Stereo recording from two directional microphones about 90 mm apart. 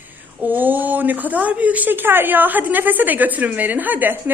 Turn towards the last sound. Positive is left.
turn(degrees=-20)  # may be behind; listen again after turning